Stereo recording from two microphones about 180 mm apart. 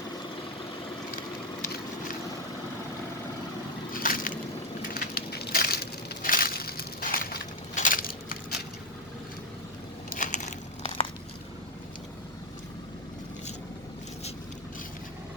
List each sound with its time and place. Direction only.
3.9 s a sound: 50° left (ahead or behind)
4.9 s crushing: 55° left (ahead or behind)
10.1 s crumpling: 45° left (ahead or behind)